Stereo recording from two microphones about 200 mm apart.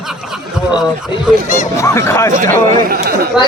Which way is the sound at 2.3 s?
40° right (ahead or behind).